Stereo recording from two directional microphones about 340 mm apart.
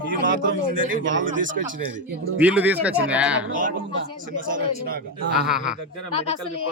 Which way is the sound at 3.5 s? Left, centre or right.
Right.